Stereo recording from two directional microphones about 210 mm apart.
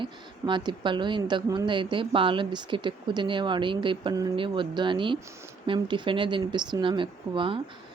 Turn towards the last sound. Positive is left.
turn(degrees=-25)  # may be behind; listen again after turning